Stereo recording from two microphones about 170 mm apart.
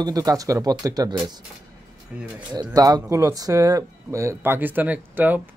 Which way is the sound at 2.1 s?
10° right (ahead or behind).